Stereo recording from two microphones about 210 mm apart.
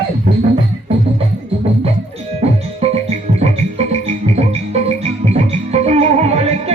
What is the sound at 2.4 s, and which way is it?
Music, 30° right (ahead or behind).